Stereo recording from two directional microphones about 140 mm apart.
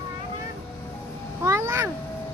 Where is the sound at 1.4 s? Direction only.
20° right (ahead or behind).